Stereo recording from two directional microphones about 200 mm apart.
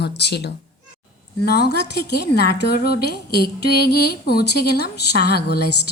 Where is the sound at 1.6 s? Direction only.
55° left (ahead or behind).